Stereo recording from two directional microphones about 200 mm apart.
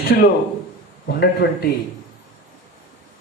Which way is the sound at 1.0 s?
55° left (ahead or behind).